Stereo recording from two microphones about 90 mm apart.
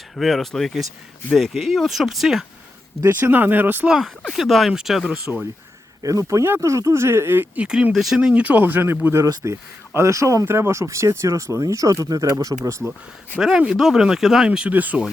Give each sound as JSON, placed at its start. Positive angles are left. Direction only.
{"t": 0.2, "sound": "speech", "side_deg": 5}
{"t": 3.0, "sound": "speech", "side_deg": -25}
{"t": 3.8, "sound": "speech", "side_deg": -5}
{"t": 6.0, "sound": "speech", "side_deg": -40}
{"t": 9.2, "sound": "speech", "side_deg": -35}
{"t": 13.4, "sound": "speech", "side_deg": -10}